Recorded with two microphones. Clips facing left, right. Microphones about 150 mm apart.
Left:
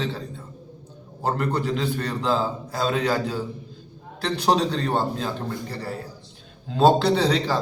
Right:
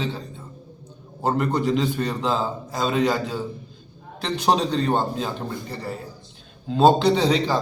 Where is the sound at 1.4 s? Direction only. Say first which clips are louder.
Right 4 dB; centre (ahead or behind).